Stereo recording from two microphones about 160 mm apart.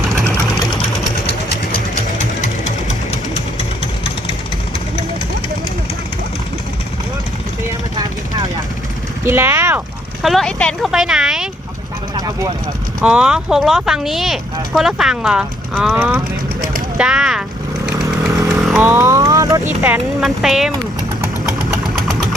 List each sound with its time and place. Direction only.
9.2 s speech: 15° right (ahead or behind)
10.2 s speech: 5° left (ahead or behind)
12.1 s vehicle: 25° right (ahead or behind)
13.0 s speech: 5° right (ahead or behind)
18.3 s chainsaw: 20° right (ahead or behind)
18.5 s chainsaw: centre (ahead or behind)
18.9 s speech: 20° right (ahead or behind)
19.8 s speech: 5° right (ahead or behind)
21.9 s engine: centre (ahead or behind)